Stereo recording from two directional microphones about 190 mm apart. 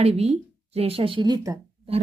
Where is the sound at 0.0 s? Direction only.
30° right (ahead or behind).